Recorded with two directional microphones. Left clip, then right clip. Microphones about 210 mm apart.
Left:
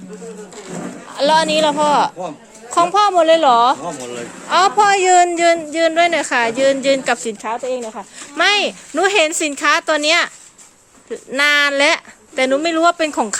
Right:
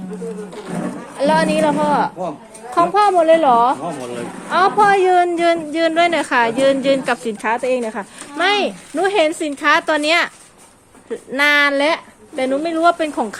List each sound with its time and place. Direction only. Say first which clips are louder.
1.1 s a woman's voice: left 2 dB; 20° left (ahead or behind)
7.3 s a woman's voice: right 4 dB; centre (ahead or behind)
8.4 s speech: left 2 dB; 30° left (ahead or behind)